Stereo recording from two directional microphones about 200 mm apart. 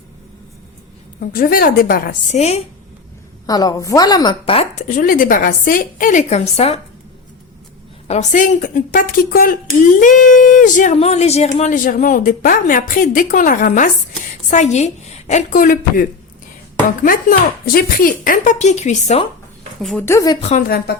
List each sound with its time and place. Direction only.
1.2 s a woman's voice: 45° left (ahead or behind)
3.4 s speech: 20° left (ahead or behind)
8.0 s speech: 35° left (ahead or behind)
19.8 s speech: centre (ahead or behind)
20.1 s speech: 15° left (ahead or behind)
20.7 s a woman's voice: 50° left (ahead or behind)